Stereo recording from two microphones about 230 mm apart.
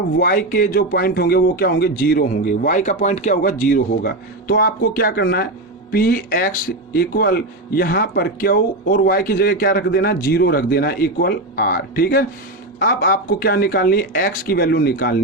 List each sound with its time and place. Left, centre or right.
0.2 s speech: left